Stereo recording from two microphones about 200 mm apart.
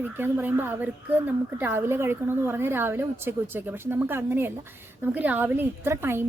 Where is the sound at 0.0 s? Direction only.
10° right (ahead or behind).